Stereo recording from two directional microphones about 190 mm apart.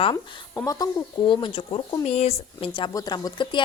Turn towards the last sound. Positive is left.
turn(degrees=25)  # may be behind; listen again after turning